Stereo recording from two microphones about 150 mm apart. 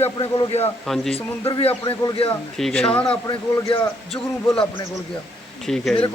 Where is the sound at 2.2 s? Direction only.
5° left (ahead or behind).